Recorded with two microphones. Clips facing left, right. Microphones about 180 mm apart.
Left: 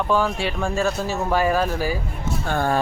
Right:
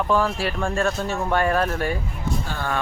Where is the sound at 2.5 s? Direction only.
50° left (ahead or behind).